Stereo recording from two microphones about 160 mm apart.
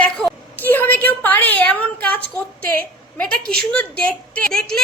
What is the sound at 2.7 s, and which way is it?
Speech, 5° left (ahead or behind).